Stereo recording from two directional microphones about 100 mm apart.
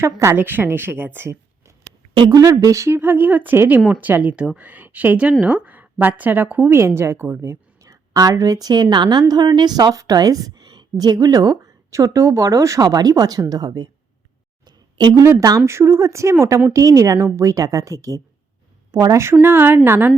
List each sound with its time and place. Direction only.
0.0 s a woman's voice: 25° right (ahead or behind)
2.1 s a woman's voice: 40° right (ahead or behind)
14.6 s a sound: 45° right (ahead or behind)
15.2 s a woman's voice: 30° right (ahead or behind)